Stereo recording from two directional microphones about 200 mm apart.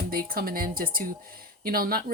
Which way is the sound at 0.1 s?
45° right (ahead or behind).